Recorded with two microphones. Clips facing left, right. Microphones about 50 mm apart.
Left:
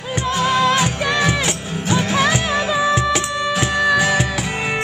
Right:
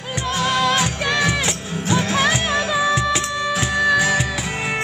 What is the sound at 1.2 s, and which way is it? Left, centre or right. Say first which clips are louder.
Music: left 2 dB; left.